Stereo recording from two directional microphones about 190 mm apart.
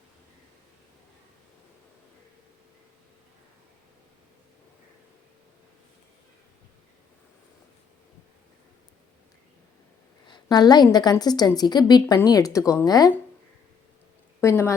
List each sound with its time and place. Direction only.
10.2 s a woman's voice: 20° left (ahead or behind)
14.4 s a woman's voice: 15° left (ahead or behind)